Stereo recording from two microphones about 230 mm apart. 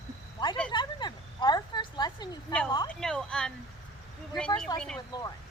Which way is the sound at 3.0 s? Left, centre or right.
Centre.